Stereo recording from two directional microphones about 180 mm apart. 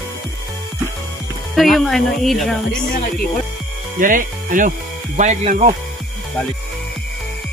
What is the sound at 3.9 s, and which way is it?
Speech, 50° right (ahead or behind).